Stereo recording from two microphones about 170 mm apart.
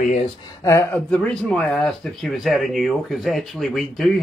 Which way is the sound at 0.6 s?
15° left (ahead or behind).